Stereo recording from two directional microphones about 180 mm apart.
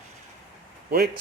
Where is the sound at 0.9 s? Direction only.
60° right (ahead or behind).